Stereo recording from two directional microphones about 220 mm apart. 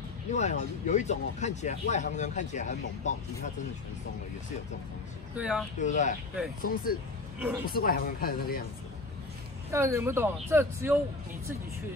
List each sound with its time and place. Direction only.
0.3 s speech: 30° left (ahead or behind)
5.4 s speech: 5° right (ahead or behind)
5.8 s speech: 35° left (ahead or behind)
9.7 s speech: 10° right (ahead or behind)